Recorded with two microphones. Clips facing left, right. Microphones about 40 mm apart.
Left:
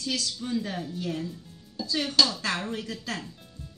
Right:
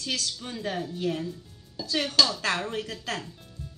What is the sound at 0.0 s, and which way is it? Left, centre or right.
Speech, right.